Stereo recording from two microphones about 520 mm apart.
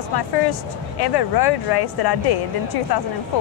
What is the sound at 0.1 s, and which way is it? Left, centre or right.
A woman's voice, left.